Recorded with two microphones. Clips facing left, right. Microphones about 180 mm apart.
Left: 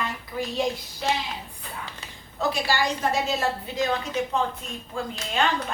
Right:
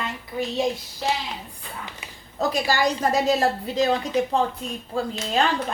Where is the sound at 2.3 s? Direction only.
40° right (ahead or behind).